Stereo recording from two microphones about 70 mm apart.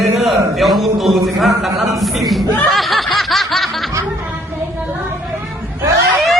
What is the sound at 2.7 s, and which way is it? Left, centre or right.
Snicker, centre.